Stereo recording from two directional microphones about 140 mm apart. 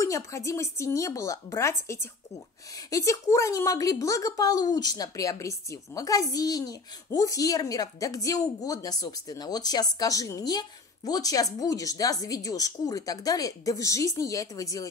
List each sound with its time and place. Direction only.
0.0 s a woman's voice: 20° left (ahead or behind)